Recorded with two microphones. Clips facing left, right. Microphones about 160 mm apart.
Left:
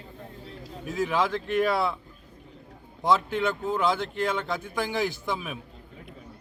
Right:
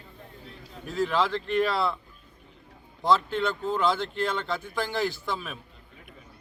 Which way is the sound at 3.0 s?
15° left (ahead or behind).